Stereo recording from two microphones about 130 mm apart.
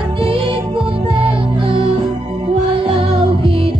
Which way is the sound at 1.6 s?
45° right (ahead or behind).